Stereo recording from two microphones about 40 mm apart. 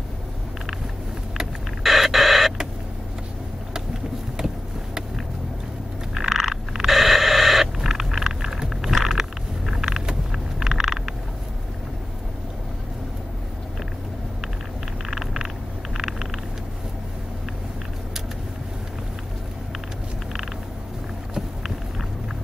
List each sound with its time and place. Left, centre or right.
1.4 s power windows: centre
4.4 s vehicle: centre
6.1 s a sound: centre
8.9 s vehicle: centre
15.0 s vehicle: centre